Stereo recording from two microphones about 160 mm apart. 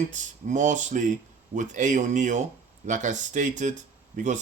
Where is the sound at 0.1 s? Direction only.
50° right (ahead or behind).